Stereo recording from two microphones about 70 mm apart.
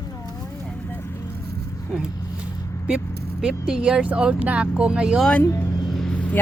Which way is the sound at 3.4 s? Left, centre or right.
Centre.